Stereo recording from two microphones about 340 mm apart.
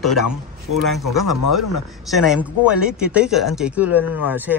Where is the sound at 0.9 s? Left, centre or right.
Centre.